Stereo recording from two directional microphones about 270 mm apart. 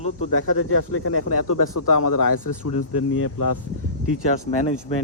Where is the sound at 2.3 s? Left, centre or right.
Left.